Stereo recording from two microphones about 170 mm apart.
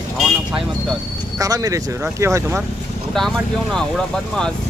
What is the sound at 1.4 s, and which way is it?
Speech, 20° right (ahead or behind).